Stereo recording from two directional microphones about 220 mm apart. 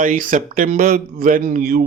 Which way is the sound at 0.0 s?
35° right (ahead or behind).